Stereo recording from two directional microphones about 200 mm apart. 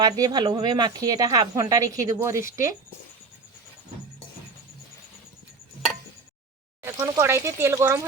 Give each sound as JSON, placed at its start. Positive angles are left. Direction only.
{"t": 0.0, "sound": "speech", "side_deg": -20}
{"t": 6.8, "sound": "speech", "side_deg": -10}